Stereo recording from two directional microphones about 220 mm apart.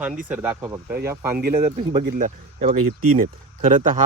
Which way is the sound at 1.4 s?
45° right (ahead or behind).